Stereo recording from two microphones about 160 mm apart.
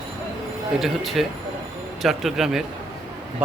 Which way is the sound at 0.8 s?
Centre (ahead or behind).